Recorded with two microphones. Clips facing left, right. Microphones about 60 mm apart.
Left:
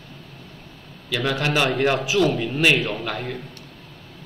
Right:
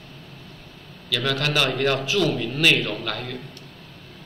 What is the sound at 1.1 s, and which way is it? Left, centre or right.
A man's voice, left.